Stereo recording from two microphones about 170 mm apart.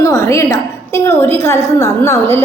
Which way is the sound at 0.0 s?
20° left (ahead or behind).